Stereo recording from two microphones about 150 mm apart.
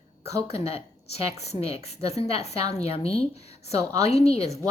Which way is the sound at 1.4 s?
45° left (ahead or behind).